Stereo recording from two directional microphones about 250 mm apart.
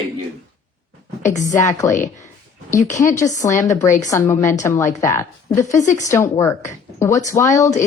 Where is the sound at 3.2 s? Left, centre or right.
Centre.